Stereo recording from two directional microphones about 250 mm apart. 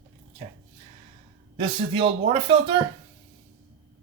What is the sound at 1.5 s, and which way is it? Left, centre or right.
Speech, centre.